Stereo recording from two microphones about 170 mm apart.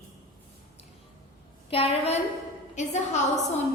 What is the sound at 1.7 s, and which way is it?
A woman's voice, 35° left (ahead or behind).